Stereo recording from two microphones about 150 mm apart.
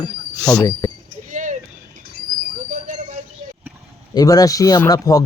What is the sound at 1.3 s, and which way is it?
Vehicle, 55° right (ahead or behind).